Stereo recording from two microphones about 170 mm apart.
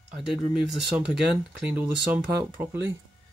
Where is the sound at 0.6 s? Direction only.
5° right (ahead or behind).